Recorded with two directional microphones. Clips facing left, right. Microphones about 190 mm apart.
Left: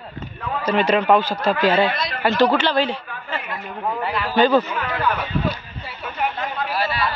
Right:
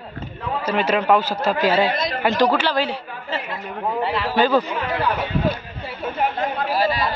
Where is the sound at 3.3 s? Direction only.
25° right (ahead or behind).